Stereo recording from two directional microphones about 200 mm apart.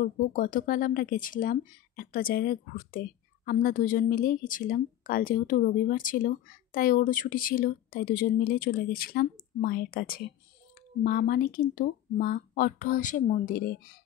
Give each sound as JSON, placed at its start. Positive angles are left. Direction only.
{"t": 0.3, "sound": "speech", "side_deg": 40}